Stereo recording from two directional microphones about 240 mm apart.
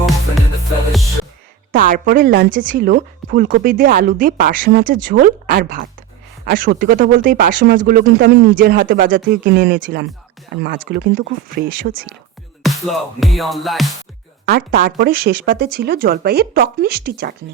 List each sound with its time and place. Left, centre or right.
1.7 s speech: right
12.6 s music: centre
14.4 s speech: right